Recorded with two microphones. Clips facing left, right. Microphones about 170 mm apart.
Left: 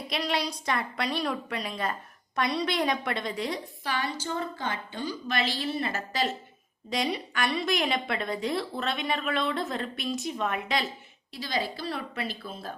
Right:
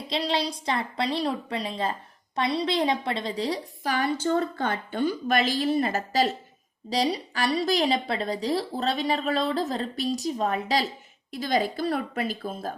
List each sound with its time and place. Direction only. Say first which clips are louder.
0.1 s a woman's voice: right 3 dB; 30° right (ahead or behind)
11.3 s a woman's voice: right 6 dB; 50° right (ahead or behind)